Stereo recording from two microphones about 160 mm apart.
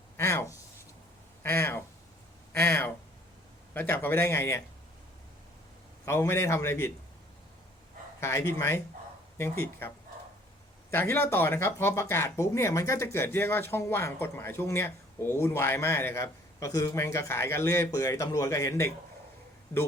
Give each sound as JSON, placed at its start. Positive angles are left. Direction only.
{"t": 0.2, "sound": "a sound", "side_deg": 15}
{"t": 3.8, "sound": "speech", "side_deg": 10}
{"t": 6.1, "sound": "speech", "side_deg": 15}
{"t": 8.2, "sound": "speech", "side_deg": 15}
{"t": 10.9, "sound": "speech", "side_deg": 15}